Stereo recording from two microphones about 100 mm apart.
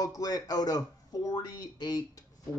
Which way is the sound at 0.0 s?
35° left (ahead or behind).